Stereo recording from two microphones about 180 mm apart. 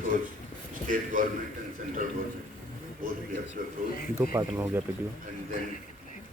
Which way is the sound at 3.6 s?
55° right (ahead or behind).